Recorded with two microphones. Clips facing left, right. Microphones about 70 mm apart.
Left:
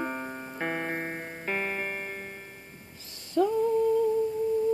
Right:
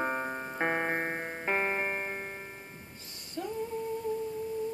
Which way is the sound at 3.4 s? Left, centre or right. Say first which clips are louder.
Left 12 dB; left.